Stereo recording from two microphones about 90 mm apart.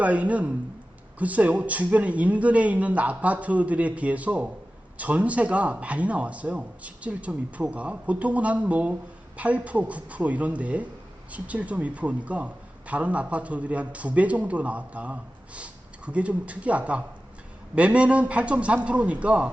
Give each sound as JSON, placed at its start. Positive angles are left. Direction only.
{"t": 0.0, "sound": "a man's voice", "side_deg": -15}